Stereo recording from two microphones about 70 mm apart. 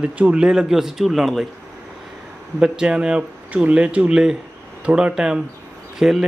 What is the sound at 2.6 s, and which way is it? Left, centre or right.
A man's voice, centre.